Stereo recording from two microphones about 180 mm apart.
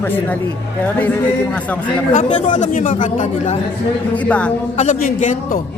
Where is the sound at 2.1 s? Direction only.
45° left (ahead or behind).